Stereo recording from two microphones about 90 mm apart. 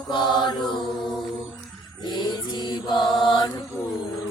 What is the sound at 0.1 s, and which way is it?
Mantra, 60° left (ahead or behind).